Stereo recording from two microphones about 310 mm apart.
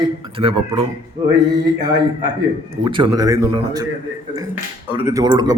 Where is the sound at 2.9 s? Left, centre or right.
Centre.